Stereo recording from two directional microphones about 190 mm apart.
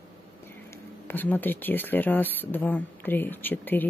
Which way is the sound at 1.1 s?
10° left (ahead or behind).